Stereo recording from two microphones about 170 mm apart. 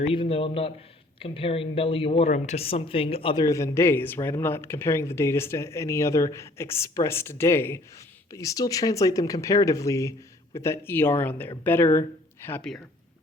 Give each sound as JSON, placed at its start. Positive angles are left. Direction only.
{"t": 0.0, "sound": "a woman's voice", "side_deg": 35}
{"t": 3.4, "sound": "speech", "side_deg": 20}